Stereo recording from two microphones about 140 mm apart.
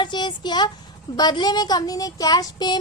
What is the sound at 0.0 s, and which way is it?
Speech, 35° left (ahead or behind).